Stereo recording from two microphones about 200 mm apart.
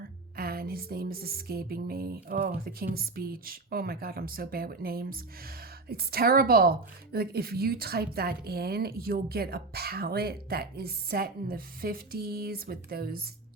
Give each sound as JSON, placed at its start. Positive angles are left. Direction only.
{"t": 0.3, "sound": "speech", "side_deg": -50}